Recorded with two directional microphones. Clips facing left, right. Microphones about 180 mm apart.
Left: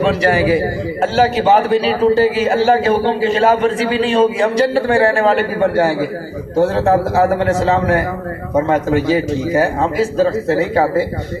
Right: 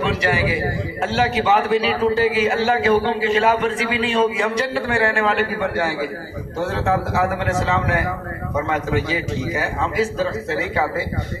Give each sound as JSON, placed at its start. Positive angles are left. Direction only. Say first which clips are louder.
{"t": 0.0, "sound": "a man's voice", "louder": "left 6 dB", "side_deg": 40}